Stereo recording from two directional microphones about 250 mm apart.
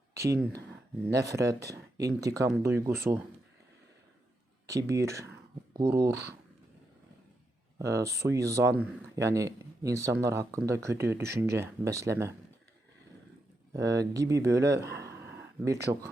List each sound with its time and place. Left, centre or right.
0.1 s speech: centre
4.7 s speech: centre
7.8 s speech: centre
13.7 s speech: centre
14.8 s a sound: right
15.2 s a sound: centre